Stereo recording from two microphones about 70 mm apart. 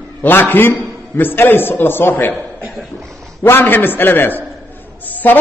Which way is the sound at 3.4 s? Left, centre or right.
Left.